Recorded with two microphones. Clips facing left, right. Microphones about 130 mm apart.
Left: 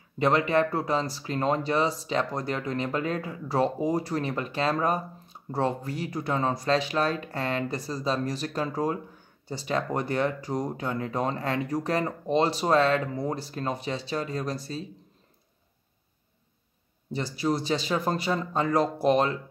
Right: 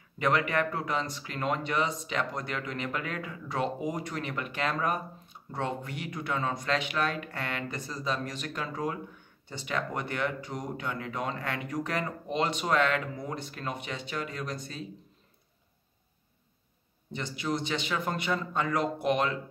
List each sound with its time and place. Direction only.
0.2 s speech: 30° left (ahead or behind)
17.1 s speech: 35° left (ahead or behind)